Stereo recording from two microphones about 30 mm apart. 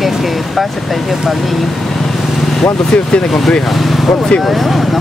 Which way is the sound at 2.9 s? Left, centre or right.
Left.